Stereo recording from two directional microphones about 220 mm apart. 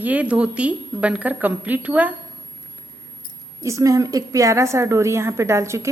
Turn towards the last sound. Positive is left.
turn(degrees=-10)  # may be behind; listen again after turning